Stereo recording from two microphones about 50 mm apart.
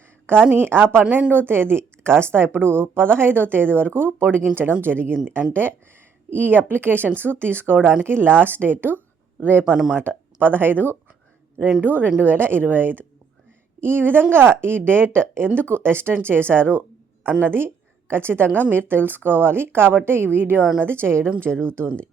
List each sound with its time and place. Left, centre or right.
0.5 s speech: right
21.5 s speech: centre